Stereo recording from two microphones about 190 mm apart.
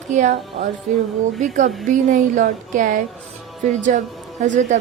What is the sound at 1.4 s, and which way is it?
A woman's voice, 40° right (ahead or behind).